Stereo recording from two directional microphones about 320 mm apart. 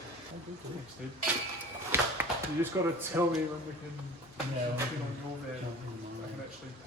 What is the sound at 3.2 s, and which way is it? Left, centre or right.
Speech, centre.